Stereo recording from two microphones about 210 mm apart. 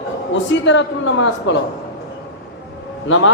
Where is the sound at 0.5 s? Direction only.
60° left (ahead or behind).